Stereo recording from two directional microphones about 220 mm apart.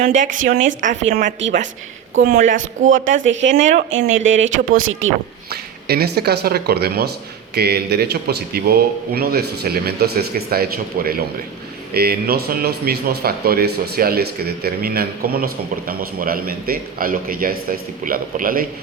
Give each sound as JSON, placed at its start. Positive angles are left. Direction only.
{"t": 0.0, "sound": "a man's voice", "side_deg": -35}
{"t": 4.3, "sound": "speech", "side_deg": -60}
{"t": 5.5, "sound": "a man's voice", "side_deg": -45}